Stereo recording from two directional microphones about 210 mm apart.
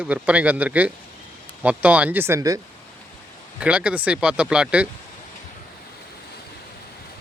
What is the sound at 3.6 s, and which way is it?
Speech, 5° right (ahead or behind).